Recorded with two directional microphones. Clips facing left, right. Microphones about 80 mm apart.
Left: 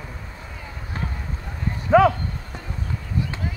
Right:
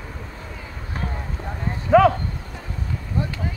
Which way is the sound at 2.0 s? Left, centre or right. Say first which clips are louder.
Right 1 dB; centre.